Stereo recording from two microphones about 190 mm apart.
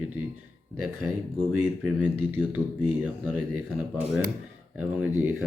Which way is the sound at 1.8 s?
10° right (ahead or behind).